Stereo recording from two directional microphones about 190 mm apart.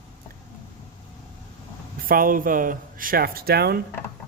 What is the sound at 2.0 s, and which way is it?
A man's voice, 50° right (ahead or behind).